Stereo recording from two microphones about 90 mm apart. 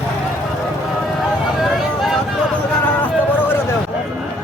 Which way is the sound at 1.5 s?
5° right (ahead or behind).